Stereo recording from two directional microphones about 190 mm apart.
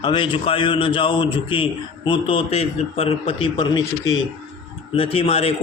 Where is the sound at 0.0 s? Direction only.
25° left (ahead or behind).